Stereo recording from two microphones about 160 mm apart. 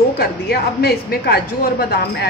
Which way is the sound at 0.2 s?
75° left (ahead or behind).